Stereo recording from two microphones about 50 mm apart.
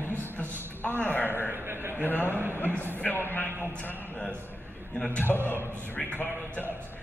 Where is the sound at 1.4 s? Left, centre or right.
Right.